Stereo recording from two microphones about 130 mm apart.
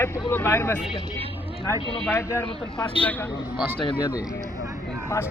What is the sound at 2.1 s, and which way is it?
Speech, 20° left (ahead or behind).